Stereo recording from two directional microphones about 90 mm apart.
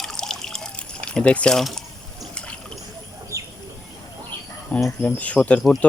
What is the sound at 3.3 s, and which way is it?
Bird, 35° right (ahead or behind).